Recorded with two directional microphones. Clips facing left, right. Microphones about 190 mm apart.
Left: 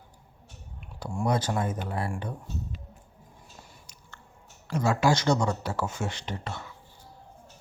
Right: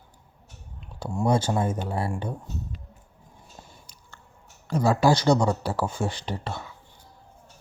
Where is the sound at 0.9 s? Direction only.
25° right (ahead or behind).